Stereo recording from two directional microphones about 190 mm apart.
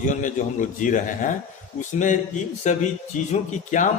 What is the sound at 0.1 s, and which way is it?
A man's voice, 40° left (ahead or behind).